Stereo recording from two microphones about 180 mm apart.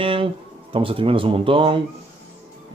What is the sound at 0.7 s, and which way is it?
Speech, 30° right (ahead or behind).